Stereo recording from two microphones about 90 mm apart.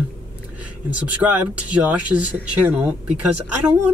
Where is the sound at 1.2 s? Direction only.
20° right (ahead or behind).